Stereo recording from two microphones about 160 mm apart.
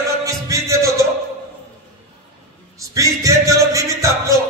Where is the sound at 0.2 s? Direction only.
20° right (ahead or behind).